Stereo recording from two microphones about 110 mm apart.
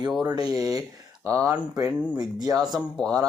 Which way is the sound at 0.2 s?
35° right (ahead or behind).